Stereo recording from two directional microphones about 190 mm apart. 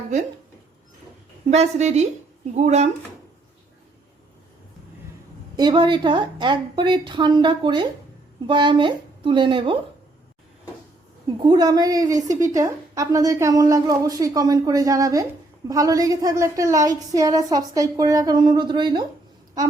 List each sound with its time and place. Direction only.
1.5 s a woman's voice: 35° right (ahead or behind)
5.5 s a woman's voice: 25° right (ahead or behind)
11.4 s a woman's voice: 20° right (ahead or behind)